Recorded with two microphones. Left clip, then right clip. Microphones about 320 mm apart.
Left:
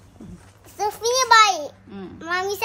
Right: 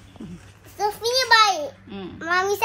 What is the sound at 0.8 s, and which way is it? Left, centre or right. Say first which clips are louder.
Speech: left 1 dB; centre.